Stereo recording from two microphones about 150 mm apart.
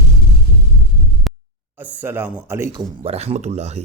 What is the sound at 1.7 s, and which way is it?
Speech, 10° right (ahead or behind).